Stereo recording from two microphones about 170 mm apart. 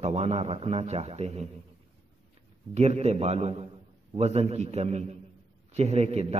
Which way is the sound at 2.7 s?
40° right (ahead or behind).